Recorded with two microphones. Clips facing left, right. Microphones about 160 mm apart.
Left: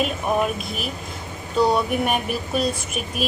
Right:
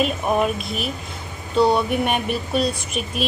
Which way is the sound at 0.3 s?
Centre (ahead or behind).